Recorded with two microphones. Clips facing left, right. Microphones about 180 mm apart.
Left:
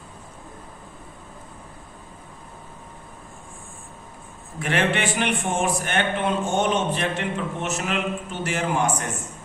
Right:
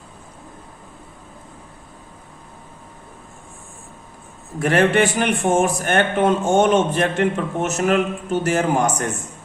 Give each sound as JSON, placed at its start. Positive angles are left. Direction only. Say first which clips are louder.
{"t": 4.6, "sound": "a man's voice", "louder": "right 7 dB", "side_deg": -40}